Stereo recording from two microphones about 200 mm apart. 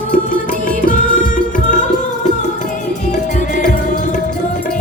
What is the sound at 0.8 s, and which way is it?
Music, 40° left (ahead or behind).